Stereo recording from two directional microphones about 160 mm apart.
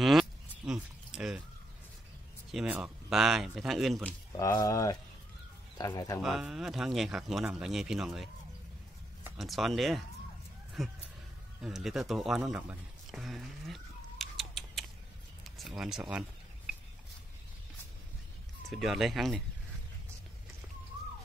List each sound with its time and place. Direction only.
0.0 s a sound: centre (ahead or behind)
2.5 s speech: 5° right (ahead or behind)
4.4 s speech: 20° left (ahead or behind)
6.2 s speech: centre (ahead or behind)
9.4 s speech: centre (ahead or behind)
15.4 s a sound: centre (ahead or behind)
18.7 s speech: centre (ahead or behind)